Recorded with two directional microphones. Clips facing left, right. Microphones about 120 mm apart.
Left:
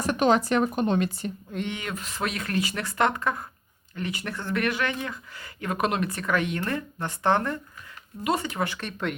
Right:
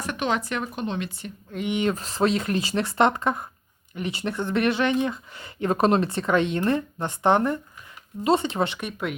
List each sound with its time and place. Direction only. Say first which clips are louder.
0.0 s speech: left 5 dB; 40° left (ahead or behind)
1.7 s speech: right 9 dB; 30° right (ahead or behind)
8.8 s speech: right 1 dB; 10° right (ahead or behind)